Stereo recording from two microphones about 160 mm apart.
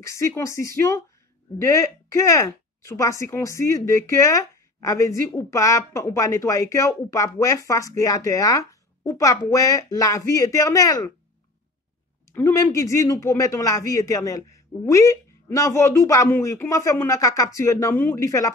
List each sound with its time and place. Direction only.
0.0 s speech: 20° left (ahead or behind)
12.4 s speech: 15° left (ahead or behind)